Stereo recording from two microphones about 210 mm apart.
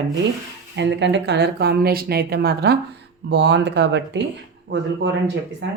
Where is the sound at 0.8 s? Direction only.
55° right (ahead or behind).